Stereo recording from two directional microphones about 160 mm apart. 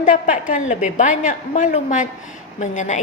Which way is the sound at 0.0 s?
55° left (ahead or behind).